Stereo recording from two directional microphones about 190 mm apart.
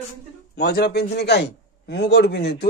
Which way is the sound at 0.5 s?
55° left (ahead or behind).